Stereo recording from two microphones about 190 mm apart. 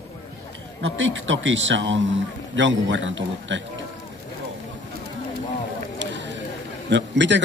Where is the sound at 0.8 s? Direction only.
75° right (ahead or behind).